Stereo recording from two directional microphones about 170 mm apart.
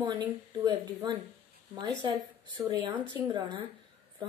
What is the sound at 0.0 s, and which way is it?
Speech, 25° right (ahead or behind).